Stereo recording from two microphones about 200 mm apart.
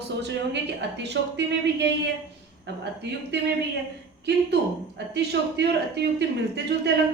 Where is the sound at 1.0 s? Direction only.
60° right (ahead or behind).